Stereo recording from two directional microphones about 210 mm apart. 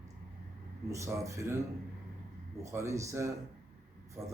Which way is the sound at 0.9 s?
15° right (ahead or behind).